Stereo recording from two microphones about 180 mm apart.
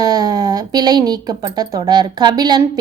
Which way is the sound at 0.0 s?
20° right (ahead or behind).